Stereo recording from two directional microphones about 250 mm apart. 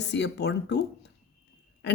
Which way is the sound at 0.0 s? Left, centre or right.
Left.